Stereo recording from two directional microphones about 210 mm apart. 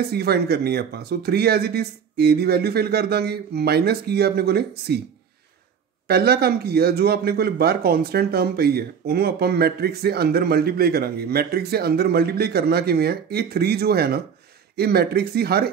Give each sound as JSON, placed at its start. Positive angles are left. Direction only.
{"t": 0.0, "sound": "speech", "side_deg": -50}
{"t": 6.0, "sound": "speech", "side_deg": -50}